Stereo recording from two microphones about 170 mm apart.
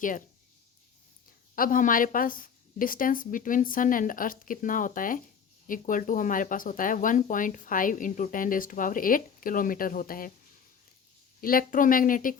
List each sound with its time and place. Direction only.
1.5 s speech: 55° left (ahead or behind)
11.3 s speech: 55° left (ahead or behind)